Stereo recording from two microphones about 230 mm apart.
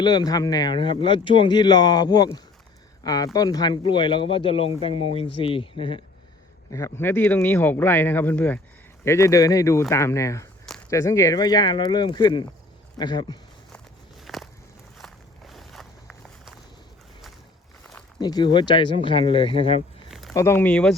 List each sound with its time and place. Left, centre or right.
0.0 s speech: centre
14.3 s walk: centre
18.2 s speech: centre
20.1 s a sound: centre
20.3 s speech: centre